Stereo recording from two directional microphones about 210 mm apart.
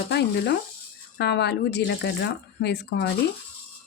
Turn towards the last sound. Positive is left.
turn(degrees=55)  # may be behind; listen again after turning